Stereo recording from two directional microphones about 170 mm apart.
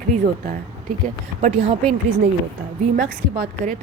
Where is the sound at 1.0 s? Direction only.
45° right (ahead or behind).